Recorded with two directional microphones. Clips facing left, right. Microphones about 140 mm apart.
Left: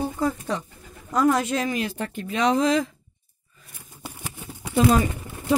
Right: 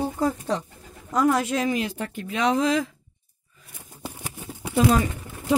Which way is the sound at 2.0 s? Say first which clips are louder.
Left 1 dB; 5° right (ahead or behind).